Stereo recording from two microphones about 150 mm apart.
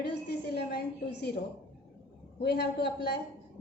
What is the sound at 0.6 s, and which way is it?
Speech, 90° left.